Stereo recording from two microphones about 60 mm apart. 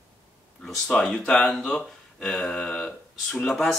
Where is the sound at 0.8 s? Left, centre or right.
Centre.